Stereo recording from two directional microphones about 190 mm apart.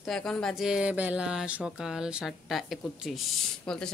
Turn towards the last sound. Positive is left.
turn(degrees=5)  # may be behind; listen again after turning